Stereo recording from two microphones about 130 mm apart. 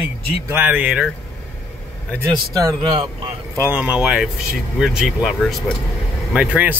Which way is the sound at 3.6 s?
10° right (ahead or behind).